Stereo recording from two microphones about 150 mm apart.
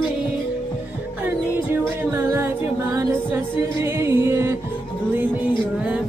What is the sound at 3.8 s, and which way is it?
Music, 20° right (ahead or behind).